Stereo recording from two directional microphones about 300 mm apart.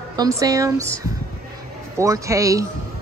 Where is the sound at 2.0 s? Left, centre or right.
Centre.